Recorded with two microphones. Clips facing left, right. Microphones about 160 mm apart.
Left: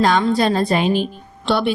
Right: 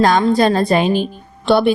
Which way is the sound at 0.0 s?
45° right (ahead or behind).